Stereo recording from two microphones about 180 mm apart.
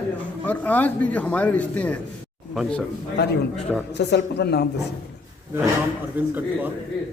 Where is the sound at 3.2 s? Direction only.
70° left (ahead or behind).